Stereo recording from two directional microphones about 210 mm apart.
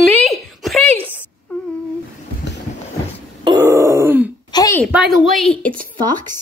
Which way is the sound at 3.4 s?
15° right (ahead or behind).